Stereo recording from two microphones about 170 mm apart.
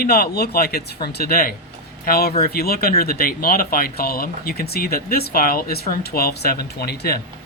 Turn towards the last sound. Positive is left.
turn(degrees=65)  # may be behind; listen again after turning